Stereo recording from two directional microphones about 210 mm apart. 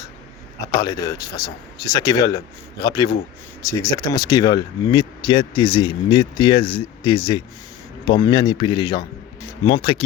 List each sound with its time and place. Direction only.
0.8 s speech: 15° left (ahead or behind)